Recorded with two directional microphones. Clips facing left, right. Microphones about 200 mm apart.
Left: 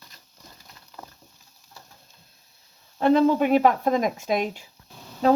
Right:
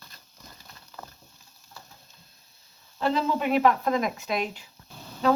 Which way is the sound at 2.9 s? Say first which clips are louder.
Left 8 dB; 50° left (ahead or behind).